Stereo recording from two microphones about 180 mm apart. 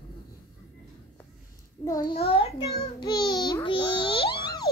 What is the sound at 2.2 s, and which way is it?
Speech, 35° left (ahead or behind).